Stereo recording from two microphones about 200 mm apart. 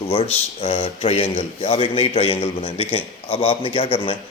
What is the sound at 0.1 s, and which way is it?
A man's voice, 30° left (ahead or behind).